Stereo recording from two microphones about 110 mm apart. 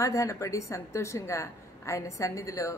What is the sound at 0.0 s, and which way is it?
A woman's voice, 30° left (ahead or behind).